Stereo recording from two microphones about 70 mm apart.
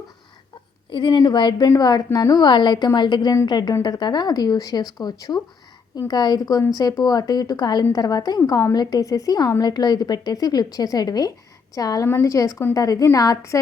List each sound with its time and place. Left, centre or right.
1.0 s a woman's voice: left
1.8 s speech: left
2.3 s a woman's voice: left
9.0 s a woman's voice: left